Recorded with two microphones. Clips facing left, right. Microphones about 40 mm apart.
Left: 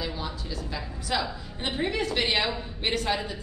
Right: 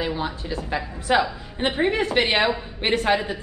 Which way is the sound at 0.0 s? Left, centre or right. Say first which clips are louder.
Right 7 dB; right.